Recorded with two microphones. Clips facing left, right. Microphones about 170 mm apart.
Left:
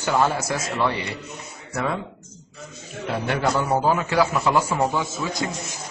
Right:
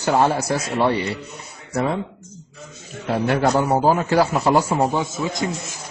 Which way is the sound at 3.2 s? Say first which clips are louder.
Right 4 dB; 40° right (ahead or behind).